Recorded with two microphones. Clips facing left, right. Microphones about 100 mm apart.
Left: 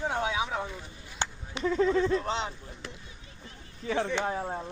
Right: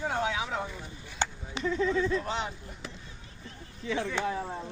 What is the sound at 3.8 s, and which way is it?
Speech, 45° left (ahead or behind).